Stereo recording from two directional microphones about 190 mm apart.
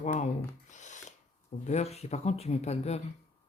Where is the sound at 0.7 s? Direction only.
40° left (ahead or behind).